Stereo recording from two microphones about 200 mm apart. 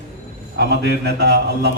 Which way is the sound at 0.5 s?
55° right (ahead or behind).